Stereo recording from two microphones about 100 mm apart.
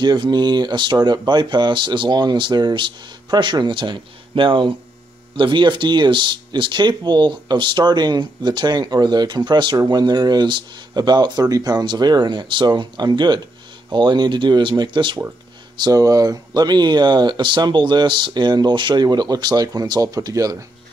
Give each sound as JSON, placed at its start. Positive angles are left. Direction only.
{"t": 0.0, "sound": "speech", "side_deg": -45}
{"t": 15.8, "sound": "speech", "side_deg": -35}